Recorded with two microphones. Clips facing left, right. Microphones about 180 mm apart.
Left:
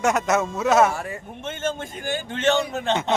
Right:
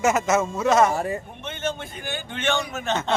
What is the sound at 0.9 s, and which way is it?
Speech, 35° right (ahead or behind).